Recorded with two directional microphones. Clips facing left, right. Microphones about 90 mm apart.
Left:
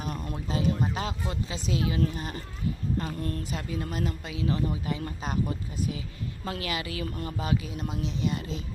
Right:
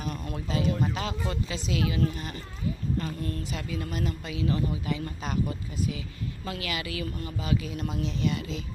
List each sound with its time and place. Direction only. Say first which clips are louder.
0.0 s a sound: even; 30° left (ahead or behind)
0.7 s a man's voice: even; 25° left (ahead or behind)
3.2 s a woman's voice: left 1 dB; 40° left (ahead or behind)
3.6 s a man's voice: even; 25° left (ahead or behind)
7.2 s a woman's voice: left 2 dB; 40° left (ahead or behind)
7.5 s a man's voice: right 4 dB; 25° left (ahead or behind)